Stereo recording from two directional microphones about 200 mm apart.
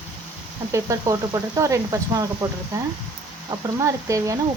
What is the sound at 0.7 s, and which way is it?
Speech, 15° right (ahead or behind).